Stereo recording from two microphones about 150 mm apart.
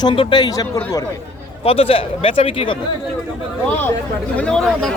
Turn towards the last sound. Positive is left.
turn(degrees=5)  # may be behind; listen again after turning